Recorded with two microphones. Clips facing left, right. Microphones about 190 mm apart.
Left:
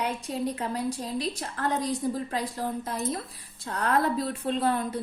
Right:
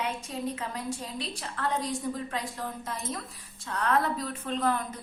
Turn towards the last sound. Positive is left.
turn(degrees=30)  # may be behind; listen again after turning